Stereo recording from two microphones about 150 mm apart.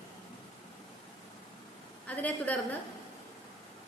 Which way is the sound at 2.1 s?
10° left (ahead or behind).